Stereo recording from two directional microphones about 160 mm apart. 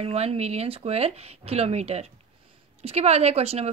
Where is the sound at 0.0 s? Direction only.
40° right (ahead or behind).